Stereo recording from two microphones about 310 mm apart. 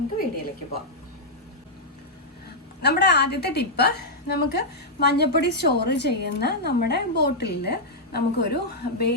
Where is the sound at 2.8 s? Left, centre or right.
Left.